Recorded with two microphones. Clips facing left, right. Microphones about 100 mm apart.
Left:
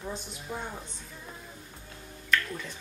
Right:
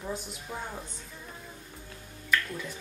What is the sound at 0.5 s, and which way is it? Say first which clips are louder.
Speech: left 2 dB; centre (ahead or behind).